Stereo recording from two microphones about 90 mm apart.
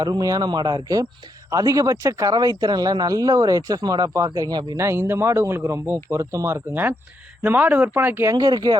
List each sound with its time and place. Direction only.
0.0 s speech: 45° right (ahead or behind)
4.8 s speech: 30° right (ahead or behind)
8.4 s speech: 50° right (ahead or behind)